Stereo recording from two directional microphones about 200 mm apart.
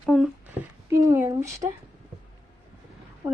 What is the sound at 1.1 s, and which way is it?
Speech, 10° right (ahead or behind).